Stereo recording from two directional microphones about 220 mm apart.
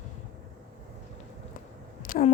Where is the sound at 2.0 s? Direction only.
40° left (ahead or behind).